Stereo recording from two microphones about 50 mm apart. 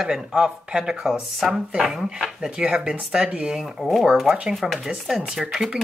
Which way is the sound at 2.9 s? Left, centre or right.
Right.